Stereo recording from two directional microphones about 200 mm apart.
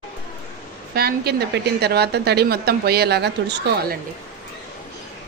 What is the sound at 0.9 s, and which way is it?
A woman's voice, 50° right (ahead or behind).